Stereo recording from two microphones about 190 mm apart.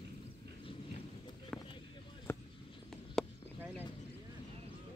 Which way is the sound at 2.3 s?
15° left (ahead or behind).